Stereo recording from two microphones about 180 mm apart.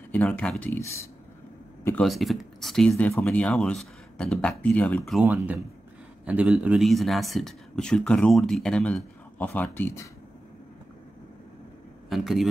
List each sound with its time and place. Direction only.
0.1 s speech: 10° left (ahead or behind)
1.9 s speech: centre (ahead or behind)
5.2 s speech: 10° right (ahead or behind); by 10.0 s 10° left (ahead or behind)
12.1 s speech: centre (ahead or behind)